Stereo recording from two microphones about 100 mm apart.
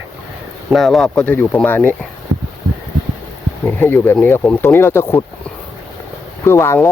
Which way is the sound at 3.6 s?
20° left (ahead or behind).